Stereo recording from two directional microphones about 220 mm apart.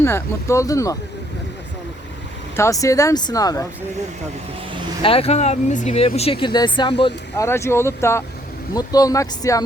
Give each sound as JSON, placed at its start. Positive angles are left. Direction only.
{"t": 0.0, "sound": "speech", "side_deg": 10}
{"t": 2.6, "sound": "speech", "side_deg": 15}
{"t": 5.0, "sound": "speech", "side_deg": 25}
{"t": 7.4, "sound": "speech", "side_deg": 10}